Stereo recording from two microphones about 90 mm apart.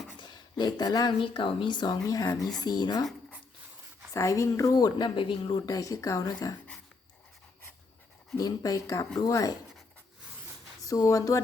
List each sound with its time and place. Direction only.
0.2 s speech: 55° left (ahead or behind)
4.1 s speech: 35° left (ahead or behind); by 5.5 s 70° left (ahead or behind)
5.5 s speech: 45° left (ahead or behind)
8.4 s speech: 45° left (ahead or behind)
10.8 s speech: 40° left (ahead or behind)